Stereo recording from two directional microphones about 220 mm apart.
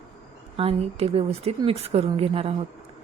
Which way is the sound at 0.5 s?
25° right (ahead or behind).